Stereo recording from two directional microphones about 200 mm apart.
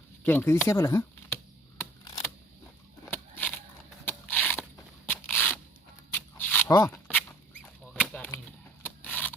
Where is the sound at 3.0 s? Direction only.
10° left (ahead or behind).